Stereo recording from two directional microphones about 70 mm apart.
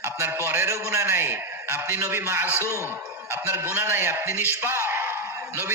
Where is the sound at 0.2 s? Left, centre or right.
Right.